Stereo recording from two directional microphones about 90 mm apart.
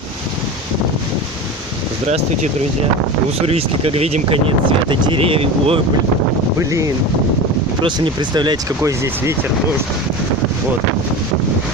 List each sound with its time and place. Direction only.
3.4 s speech: 90° right
6.6 s speech: 35° right (ahead or behind)
7.8 s speech: 65° right (ahead or behind)